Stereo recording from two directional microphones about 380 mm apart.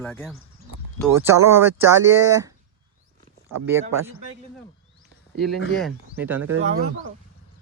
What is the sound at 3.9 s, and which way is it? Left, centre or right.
Speech, right.